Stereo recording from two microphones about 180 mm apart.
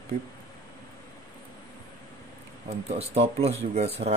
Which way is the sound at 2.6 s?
35° right (ahead or behind).